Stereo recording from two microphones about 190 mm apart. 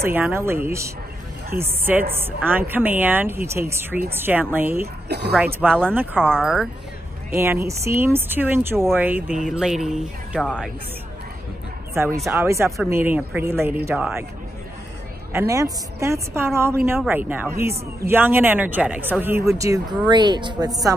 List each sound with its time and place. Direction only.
0.0 s speech: 10° right (ahead or behind)
5.0 s speech: 60° right (ahead or behind)
5.3 s speech: 10° right (ahead or behind)
6.1 s speech: 5° left (ahead or behind)
7.3 s speech: 15° right (ahead or behind)
11.9 s speech: 15° right (ahead or behind)
15.3 s speech: 15° right (ahead or behind)